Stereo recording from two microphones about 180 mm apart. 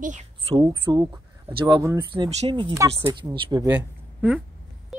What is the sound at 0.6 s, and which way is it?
Speech, 20° right (ahead or behind).